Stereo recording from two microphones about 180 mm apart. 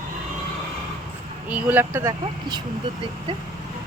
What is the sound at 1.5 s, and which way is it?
Speech, 10° right (ahead or behind).